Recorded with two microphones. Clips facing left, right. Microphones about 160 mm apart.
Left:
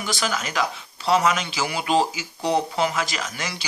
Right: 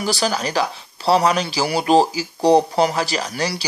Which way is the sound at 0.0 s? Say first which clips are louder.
Right 6 dB; 35° right (ahead or behind).